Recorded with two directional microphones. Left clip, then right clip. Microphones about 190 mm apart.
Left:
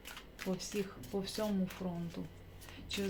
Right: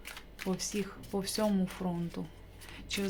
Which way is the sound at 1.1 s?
30° right (ahead or behind).